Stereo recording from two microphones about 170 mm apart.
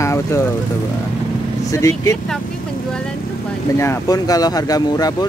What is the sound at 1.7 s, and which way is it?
Speech, 20° left (ahead or behind).